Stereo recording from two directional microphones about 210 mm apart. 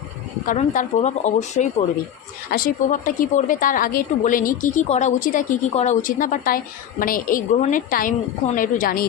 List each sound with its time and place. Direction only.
0.4 s a woman's voice: 40° left (ahead or behind)